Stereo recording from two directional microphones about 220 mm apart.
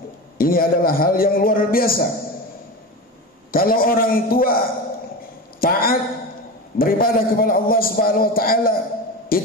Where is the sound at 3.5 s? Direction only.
40° left (ahead or behind).